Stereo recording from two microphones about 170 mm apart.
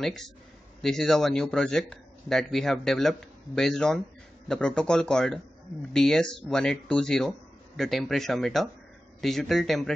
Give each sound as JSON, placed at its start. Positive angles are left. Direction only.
{"t": 0.0, "sound": "speech", "side_deg": 0}